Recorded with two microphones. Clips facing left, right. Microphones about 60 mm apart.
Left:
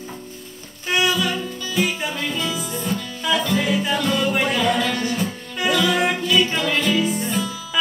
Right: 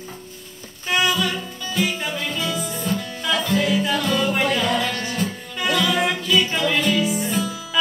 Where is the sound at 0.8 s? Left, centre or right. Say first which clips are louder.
Even; centre.